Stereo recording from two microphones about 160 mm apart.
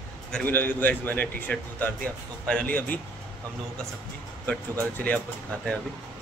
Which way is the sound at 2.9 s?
10° left (ahead or behind).